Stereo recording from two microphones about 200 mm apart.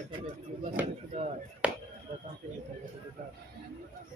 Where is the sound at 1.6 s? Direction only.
5° right (ahead or behind).